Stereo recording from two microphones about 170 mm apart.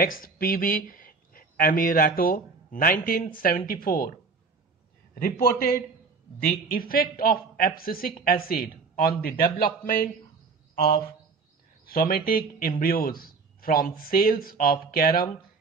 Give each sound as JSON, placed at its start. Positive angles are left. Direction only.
{"t": 0.0, "sound": "speech", "side_deg": 55}
{"t": 5.1, "sound": "a man's voice", "side_deg": 60}
{"t": 11.8, "sound": "a man's voice", "side_deg": 60}